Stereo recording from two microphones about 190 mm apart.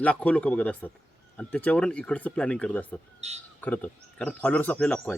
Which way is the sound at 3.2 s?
35° right (ahead or behind).